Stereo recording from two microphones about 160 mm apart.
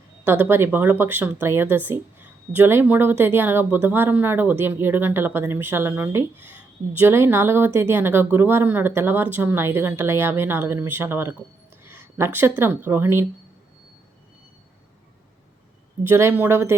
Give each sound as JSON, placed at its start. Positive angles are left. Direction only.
{"t": 0.3, "sound": "speech", "side_deg": -15}
{"t": 16.0, "sound": "speech", "side_deg": -15}